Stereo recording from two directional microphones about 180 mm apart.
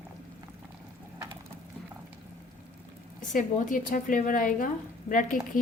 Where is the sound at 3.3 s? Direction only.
45° left (ahead or behind).